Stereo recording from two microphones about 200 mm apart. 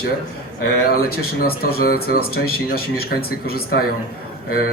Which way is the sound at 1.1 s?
50° left (ahead or behind).